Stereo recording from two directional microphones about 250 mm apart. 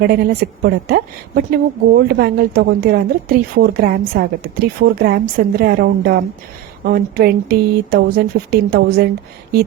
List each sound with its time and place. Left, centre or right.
0.0 s a woman's voice: right